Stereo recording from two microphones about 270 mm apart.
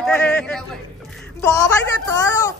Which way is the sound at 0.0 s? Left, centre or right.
Centre.